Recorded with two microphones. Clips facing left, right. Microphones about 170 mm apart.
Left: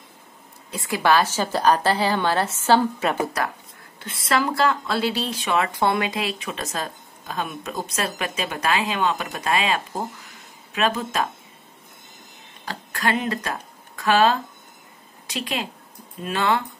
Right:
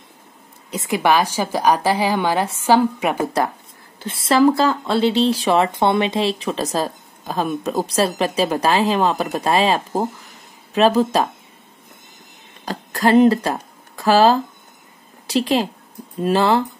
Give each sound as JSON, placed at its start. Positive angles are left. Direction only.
{"t": 0.7, "sound": "a woman's voice", "side_deg": -20}
{"t": 4.0, "sound": "speech", "side_deg": -30}
{"t": 12.6, "sound": "speech", "side_deg": -35}